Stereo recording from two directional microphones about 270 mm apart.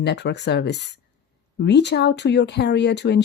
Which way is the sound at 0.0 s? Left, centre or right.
Left.